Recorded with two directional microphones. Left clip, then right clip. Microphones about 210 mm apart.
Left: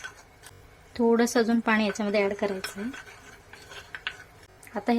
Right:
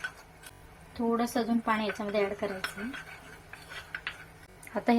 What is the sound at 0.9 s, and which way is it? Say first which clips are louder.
Speech: left 7 dB; 45° left (ahead or behind).